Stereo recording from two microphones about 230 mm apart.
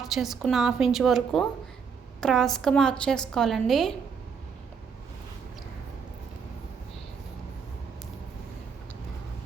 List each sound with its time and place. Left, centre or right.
0.0 s a woman's voice: centre